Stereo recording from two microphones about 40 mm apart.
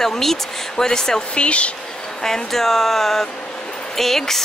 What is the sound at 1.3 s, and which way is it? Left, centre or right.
Speech, left.